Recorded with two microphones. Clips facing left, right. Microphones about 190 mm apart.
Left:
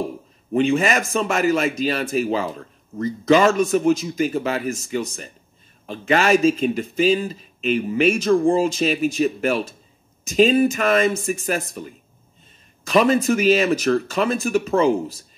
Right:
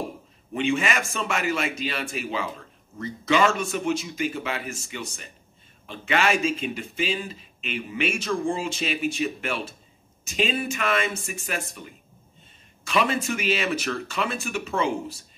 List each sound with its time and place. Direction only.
0.5 s speech: 40° left (ahead or behind)